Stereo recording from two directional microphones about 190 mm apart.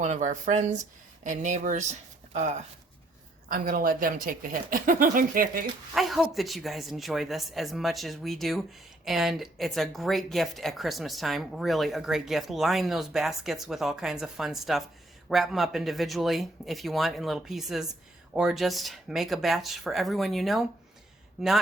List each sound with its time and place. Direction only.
0.0 s speech: 40° right (ahead or behind)
5.9 s speech: centre (ahead or behind)